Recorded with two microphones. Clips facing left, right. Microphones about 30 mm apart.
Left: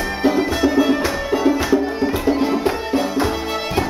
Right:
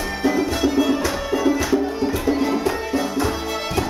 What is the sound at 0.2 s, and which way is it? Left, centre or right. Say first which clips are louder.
Music: left 3 dB; left.